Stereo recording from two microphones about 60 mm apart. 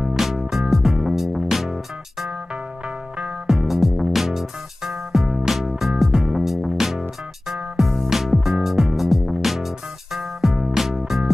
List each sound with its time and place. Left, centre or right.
0.0 s music: centre
3.4 s music: centre